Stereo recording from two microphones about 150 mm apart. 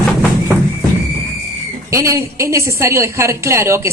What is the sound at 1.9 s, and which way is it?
A woman's voice, 20° right (ahead or behind).